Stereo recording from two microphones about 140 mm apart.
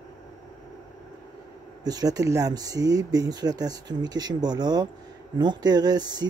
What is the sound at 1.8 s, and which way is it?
Speech, 25° right (ahead or behind).